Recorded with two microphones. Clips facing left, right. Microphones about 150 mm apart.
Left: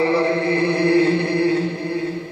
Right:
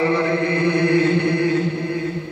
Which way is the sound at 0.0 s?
30° left (ahead or behind).